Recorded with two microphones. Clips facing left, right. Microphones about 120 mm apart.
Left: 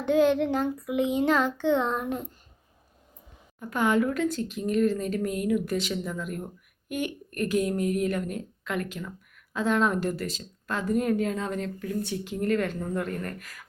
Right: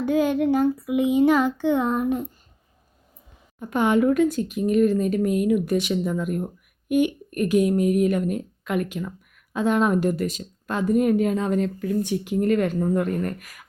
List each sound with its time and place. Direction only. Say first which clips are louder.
0.0 s speech: right 1 dB; 5° right (ahead or behind)
3.6 s speech: right 4 dB; 20° right (ahead or behind)